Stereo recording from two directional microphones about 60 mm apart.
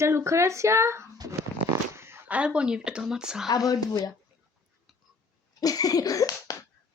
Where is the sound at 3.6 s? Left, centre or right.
Left.